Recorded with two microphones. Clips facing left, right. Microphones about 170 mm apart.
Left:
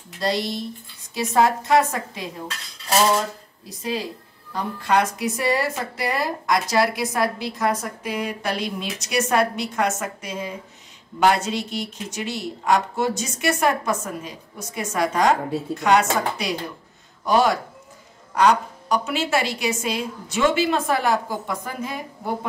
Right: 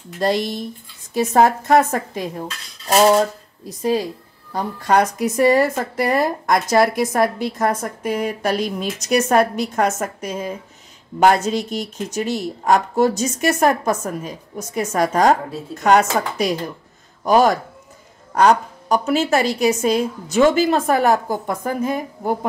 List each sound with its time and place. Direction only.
0.2 s speech: 50° right (ahead or behind)